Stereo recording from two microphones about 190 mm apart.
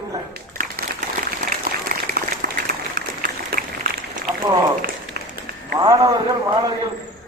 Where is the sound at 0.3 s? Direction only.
50° right (ahead or behind).